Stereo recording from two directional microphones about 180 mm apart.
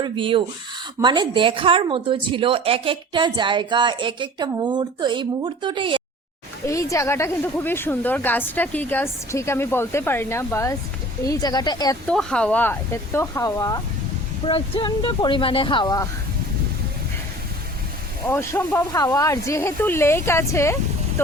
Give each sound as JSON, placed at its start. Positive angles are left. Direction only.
{"t": 0.0, "sound": "a woman's voice", "side_deg": -30}
{"t": 6.7, "sound": "speech", "side_deg": 15}
{"t": 12.0, "sound": "speech", "side_deg": 5}
{"t": 18.3, "sound": "speech", "side_deg": 15}